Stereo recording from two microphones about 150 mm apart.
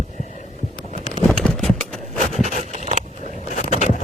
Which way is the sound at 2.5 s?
55° right (ahead or behind).